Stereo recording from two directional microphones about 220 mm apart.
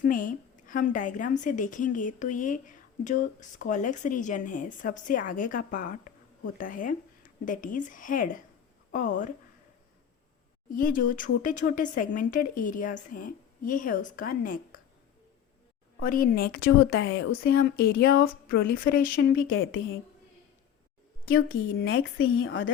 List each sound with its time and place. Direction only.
0.0 s a woman's voice: 40° left (ahead or behind)
10.7 s a woman's voice: 40° left (ahead or behind)
16.0 s a woman's voice: 40° left (ahead or behind)
19.5 s a woman's voice: 60° left (ahead or behind)
21.2 s speech: 40° left (ahead or behind)
21.8 s a woman's voice: 65° left (ahead or behind)